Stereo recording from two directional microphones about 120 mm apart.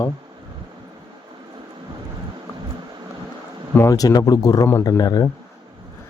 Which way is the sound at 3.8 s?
30° left (ahead or behind).